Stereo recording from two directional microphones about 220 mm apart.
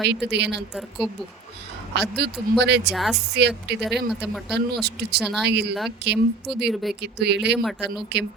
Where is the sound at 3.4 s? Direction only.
50° right (ahead or behind).